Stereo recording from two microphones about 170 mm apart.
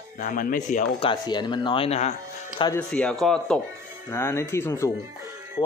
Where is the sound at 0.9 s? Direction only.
30° left (ahead or behind).